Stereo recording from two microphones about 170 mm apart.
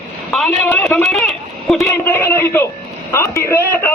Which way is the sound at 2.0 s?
15° left (ahead or behind).